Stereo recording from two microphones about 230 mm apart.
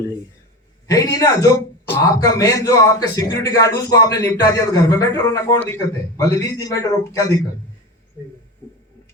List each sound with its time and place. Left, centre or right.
0.9 s speech: centre